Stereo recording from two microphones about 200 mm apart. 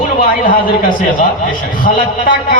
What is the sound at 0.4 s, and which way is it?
Speech, 40° left (ahead or behind).